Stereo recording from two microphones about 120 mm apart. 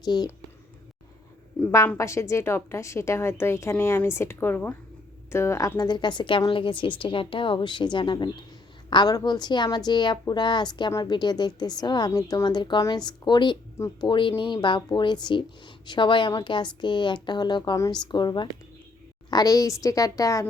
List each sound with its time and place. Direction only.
0.0 s speech: 35° left (ahead or behind)
2.0 s a woman's voice: 25° left (ahead or behind)